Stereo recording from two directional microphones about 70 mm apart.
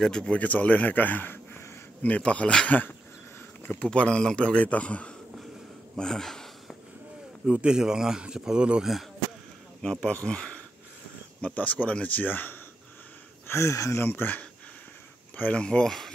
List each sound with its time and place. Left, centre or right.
0.0 s a man's voice: centre; by 1.6 s left
2.0 s a man's voice: centre
5.9 s a sound: centre
7.4 s speech: centre
9.8 s a man's voice: centre
13.5 s speech: left
15.3 s a man's voice: centre